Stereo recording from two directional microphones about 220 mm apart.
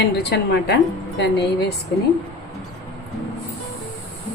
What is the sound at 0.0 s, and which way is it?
Speech, 50° left (ahead or behind).